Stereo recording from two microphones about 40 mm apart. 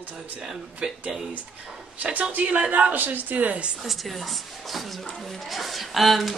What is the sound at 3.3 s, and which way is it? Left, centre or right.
Speech, right.